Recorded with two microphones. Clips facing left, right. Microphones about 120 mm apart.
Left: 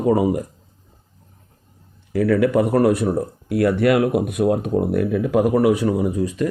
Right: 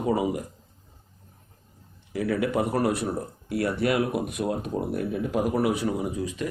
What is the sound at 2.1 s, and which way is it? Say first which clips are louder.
Speech: left 8 dB; 55° left (ahead or behind).